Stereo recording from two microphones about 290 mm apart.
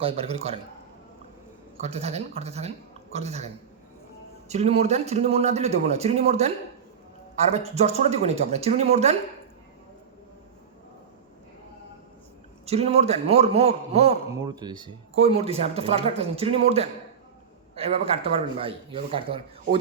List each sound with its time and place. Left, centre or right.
0.0 s a man's voice: centre
1.8 s a man's voice: right
12.6 s a man's voice: right